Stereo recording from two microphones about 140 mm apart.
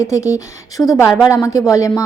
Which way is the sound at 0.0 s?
20° left (ahead or behind).